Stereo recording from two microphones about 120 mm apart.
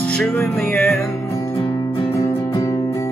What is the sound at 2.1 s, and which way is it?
Music, 25° left (ahead or behind).